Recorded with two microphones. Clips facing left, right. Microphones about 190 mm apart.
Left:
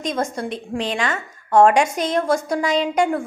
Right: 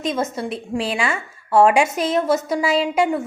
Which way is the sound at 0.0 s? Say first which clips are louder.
Right 1 dB; 5° right (ahead or behind).